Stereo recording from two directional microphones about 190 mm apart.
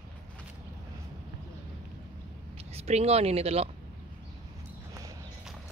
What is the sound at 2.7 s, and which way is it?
Speech, 35° right (ahead or behind).